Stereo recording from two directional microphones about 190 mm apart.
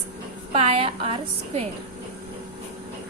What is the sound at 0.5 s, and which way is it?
Speech, 30° right (ahead or behind).